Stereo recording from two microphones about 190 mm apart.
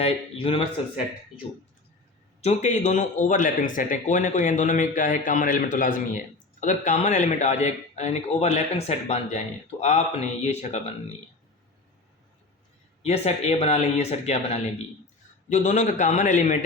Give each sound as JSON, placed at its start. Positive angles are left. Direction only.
{"t": 0.0, "sound": "a man's voice", "side_deg": 30}
{"t": 2.4, "sound": "speech", "side_deg": 35}
{"t": 13.0, "sound": "speech", "side_deg": 35}